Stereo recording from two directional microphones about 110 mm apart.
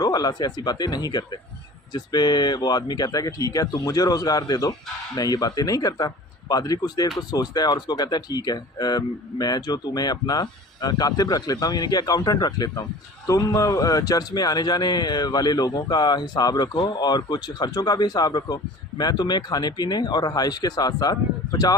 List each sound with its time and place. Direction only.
0.0 s a man's voice: 35° left (ahead or behind)